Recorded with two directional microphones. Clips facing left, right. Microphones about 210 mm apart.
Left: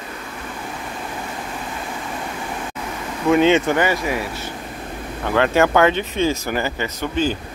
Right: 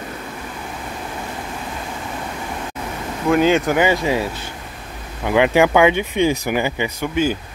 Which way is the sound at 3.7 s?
20° right (ahead or behind).